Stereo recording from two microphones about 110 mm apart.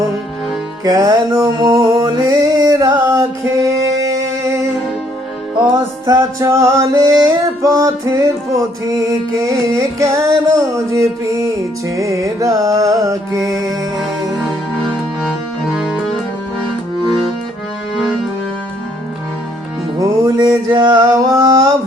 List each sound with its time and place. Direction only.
0.9 s music: 35° right (ahead or behind)
6.1 s music: 30° right (ahead or behind)
15.2 s music: 5° right (ahead or behind)
20.0 s music: 40° right (ahead or behind)